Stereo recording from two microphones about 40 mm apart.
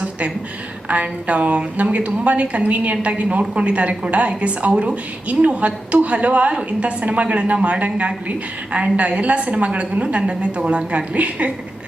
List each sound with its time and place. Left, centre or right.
0.9 s a woman's voice: right